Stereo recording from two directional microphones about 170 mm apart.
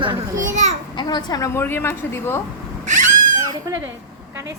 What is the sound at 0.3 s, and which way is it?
Children playing, 45° right (ahead or behind).